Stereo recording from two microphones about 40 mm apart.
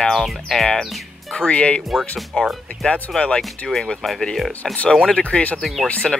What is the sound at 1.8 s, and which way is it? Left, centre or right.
Speech, centre.